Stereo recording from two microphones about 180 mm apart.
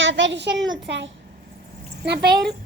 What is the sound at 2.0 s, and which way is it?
Speech, 70° right (ahead or behind).